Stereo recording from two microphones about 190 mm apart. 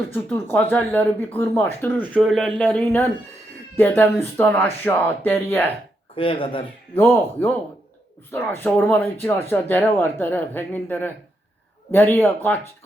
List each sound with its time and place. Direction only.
0.5 s a man's voice: 10° left (ahead or behind)
6.1 s speech: 30° left (ahead or behind)
6.9 s speech: 10° left (ahead or behind)